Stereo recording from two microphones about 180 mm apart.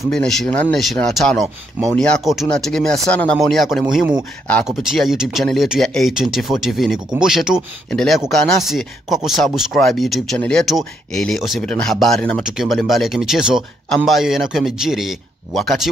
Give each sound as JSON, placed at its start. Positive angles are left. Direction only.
{"t": 0.1, "sound": "speech", "side_deg": 0}